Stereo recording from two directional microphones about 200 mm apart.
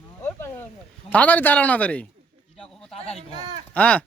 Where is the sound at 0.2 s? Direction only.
10° left (ahead or behind).